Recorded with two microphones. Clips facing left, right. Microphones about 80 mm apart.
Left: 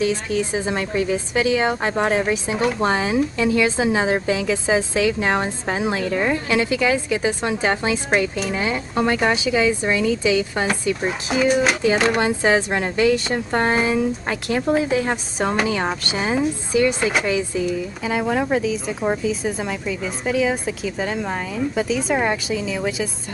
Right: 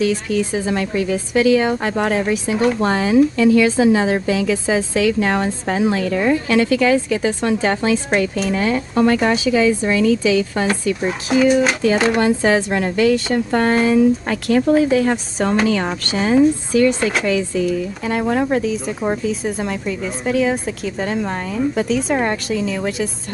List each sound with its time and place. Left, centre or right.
0.0 s speech: left
10.7 s speech: centre